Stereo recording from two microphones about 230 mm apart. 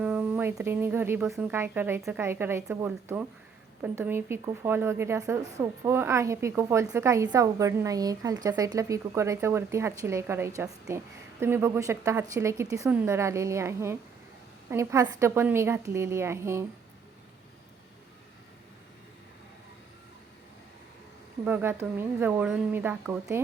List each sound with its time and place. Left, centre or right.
0.0 s speech: centre
21.4 s speech: centre